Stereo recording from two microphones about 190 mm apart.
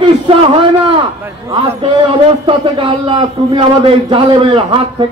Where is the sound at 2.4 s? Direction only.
25° right (ahead or behind).